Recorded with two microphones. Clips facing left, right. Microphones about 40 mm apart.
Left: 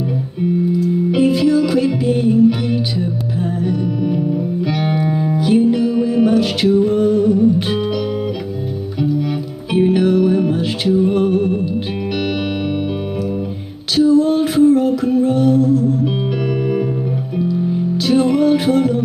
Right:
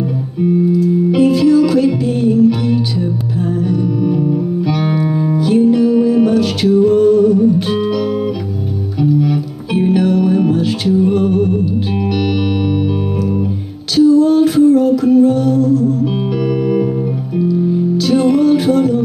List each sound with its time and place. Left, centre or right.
1.1 s music: centre
3.6 s music: left
9.2 s music: centre
13.9 s music: left
16.1 s music: centre